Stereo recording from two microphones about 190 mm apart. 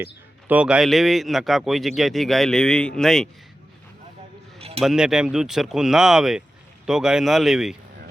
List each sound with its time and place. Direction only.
0.0 s speech: 10° right (ahead or behind)
4.5 s a sound: 30° right (ahead or behind)
4.8 s speech: centre (ahead or behind)